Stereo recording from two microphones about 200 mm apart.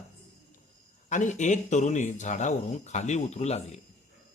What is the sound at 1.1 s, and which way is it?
Speech, 40° left (ahead or behind).